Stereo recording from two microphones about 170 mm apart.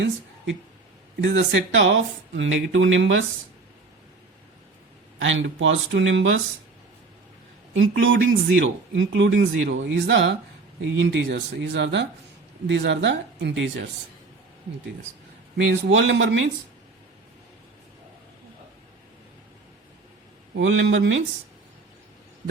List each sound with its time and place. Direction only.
1.2 s speech: 90° right
5.2 s speech: 90° right
7.7 s speech: 90° right
15.5 s speech: 90° right
20.6 s speech: 90° right